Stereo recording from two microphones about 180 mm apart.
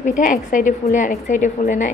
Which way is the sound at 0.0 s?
45° left (ahead or behind).